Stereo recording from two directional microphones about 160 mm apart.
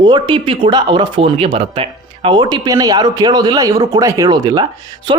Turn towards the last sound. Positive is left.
turn(degrees=-30)  # may be behind; listen again after turning